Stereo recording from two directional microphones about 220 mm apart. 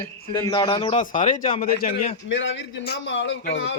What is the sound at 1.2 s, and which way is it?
Speech, 35° left (ahead or behind).